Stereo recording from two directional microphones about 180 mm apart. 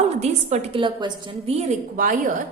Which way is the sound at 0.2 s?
35° right (ahead or behind).